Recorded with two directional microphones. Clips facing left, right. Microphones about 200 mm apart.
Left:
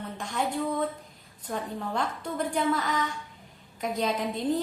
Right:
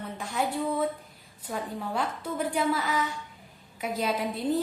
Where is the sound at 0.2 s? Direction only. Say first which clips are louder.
Even; 5° right (ahead or behind).